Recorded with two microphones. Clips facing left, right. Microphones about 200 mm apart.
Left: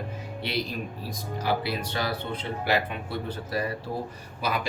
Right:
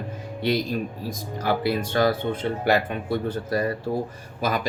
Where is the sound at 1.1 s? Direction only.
50° right (ahead or behind).